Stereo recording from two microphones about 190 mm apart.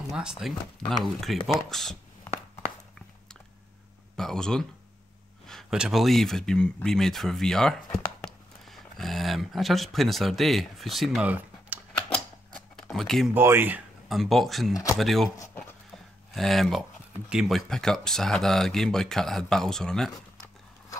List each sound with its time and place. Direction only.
0.1 s speech: 5° right (ahead or behind)
4.2 s speech: 5° left (ahead or behind)
12.1 s a sound: 5° left (ahead or behind)
13.3 s speech: 10° right (ahead or behind)
15.3 s a sound: 15° left (ahead or behind)
16.3 s speech: centre (ahead or behind)